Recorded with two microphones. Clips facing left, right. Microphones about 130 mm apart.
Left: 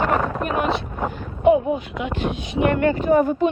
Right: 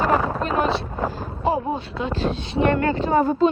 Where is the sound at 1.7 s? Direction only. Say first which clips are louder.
Even; 30° right (ahead or behind).